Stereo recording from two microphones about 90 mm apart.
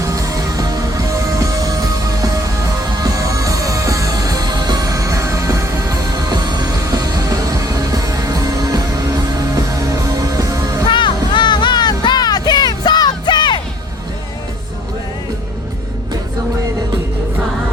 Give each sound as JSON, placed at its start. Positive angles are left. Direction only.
{"t": 0.0, "sound": "music", "side_deg": -35}
{"t": 10.8, "sound": "music", "side_deg": 65}